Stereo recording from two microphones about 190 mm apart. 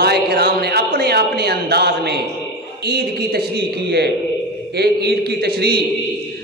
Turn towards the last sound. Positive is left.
turn(degrees=-55)  # may be behind; listen again after turning